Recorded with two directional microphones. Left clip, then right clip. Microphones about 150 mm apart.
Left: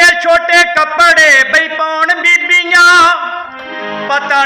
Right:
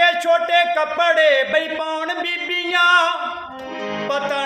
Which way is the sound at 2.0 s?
50° right (ahead or behind).